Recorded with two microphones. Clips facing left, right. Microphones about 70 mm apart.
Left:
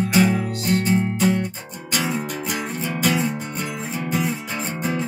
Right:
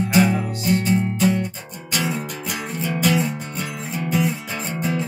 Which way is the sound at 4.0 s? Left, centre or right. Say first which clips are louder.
Right 3 dB; left.